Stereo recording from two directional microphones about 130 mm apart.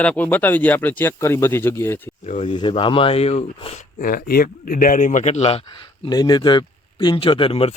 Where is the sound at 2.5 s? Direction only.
40° left (ahead or behind); by 3.8 s 55° left (ahead or behind).